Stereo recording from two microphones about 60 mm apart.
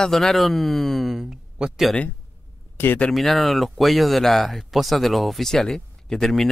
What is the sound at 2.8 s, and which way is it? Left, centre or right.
Speech, left.